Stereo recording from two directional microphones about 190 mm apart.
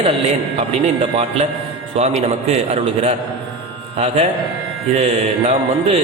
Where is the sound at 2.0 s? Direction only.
35° right (ahead or behind).